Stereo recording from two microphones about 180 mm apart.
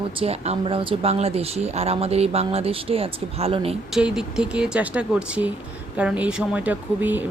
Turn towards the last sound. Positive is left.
turn(degrees=-10)  # may be behind; listen again after turning